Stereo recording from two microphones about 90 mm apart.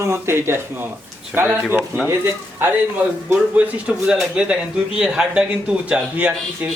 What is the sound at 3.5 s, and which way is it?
Speech, 10° right (ahead or behind).